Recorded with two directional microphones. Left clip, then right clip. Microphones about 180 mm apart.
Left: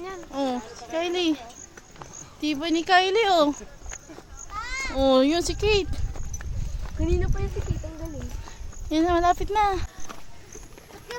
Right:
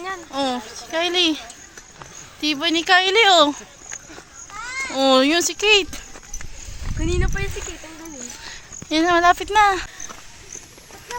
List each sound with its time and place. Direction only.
0.3 s speech: 5° right (ahead or behind)
4.6 s speech: 10° right (ahead or behind)
7.0 s speech: 30° right (ahead or behind)
8.4 s speech: 5° right (ahead or behind)